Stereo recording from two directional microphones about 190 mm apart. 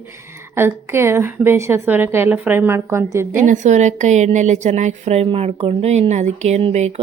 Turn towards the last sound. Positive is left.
turn(degrees=-35)  # may be behind; listen again after turning